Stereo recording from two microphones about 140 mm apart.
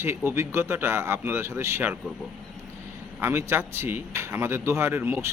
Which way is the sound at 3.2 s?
15° right (ahead or behind).